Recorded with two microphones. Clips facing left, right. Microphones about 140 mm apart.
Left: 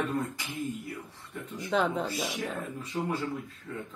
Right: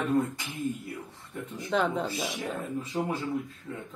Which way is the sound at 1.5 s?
Centre (ahead or behind).